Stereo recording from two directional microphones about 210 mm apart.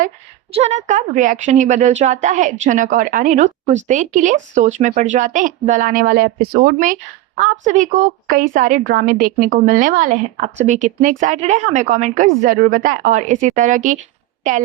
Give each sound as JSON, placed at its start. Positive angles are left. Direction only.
{"t": 0.5, "sound": "speech", "side_deg": -30}